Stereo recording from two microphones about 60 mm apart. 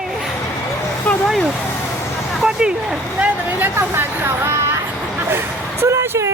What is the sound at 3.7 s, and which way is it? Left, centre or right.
Speech, right.